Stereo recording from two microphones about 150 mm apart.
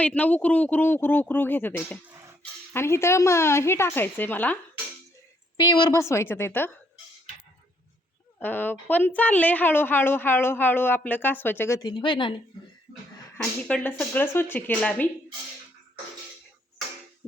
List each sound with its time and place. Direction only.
0.0 s a woman's voice: 10° left (ahead or behind)
5.5 s a woman's voice: 30° left (ahead or behind)
8.4 s a woman's voice: 10° left (ahead or behind)
11.8 s speech: 30° left (ahead or behind)
13.4 s a woman's voice: 10° left (ahead or behind)